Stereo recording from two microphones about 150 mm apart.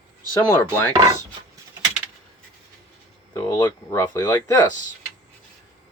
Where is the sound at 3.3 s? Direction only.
20° left (ahead or behind).